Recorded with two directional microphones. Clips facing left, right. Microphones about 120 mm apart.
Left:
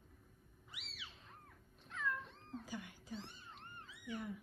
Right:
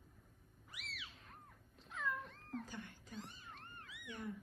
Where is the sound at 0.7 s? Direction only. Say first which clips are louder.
Right 3 dB; 25° left (ahead or behind).